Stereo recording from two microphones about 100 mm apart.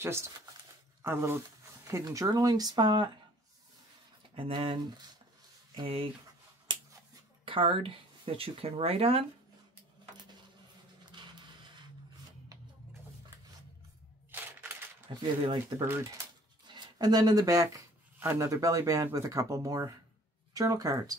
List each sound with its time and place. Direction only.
0.0 s speech: 25° right (ahead or behind); by 3.1 s 45° right (ahead or behind)
4.4 s speech: 60° right (ahead or behind)
5.8 s speech: 65° right (ahead or behind)
7.4 s speech: 60° right (ahead or behind); by 9.2 s 80° right
11.1 s a sound: 50° right (ahead or behind)
15.1 s speech: 55° right (ahead or behind); by 17.8 s 35° right (ahead or behind)
18.2 s speech: 25° right (ahead or behind)
18.5 s speech: 35° right (ahead or behind)